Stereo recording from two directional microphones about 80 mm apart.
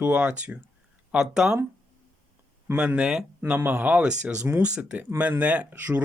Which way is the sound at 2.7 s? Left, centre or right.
Centre.